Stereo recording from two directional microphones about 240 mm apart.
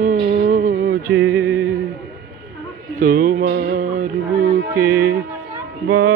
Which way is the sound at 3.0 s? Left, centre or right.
Right.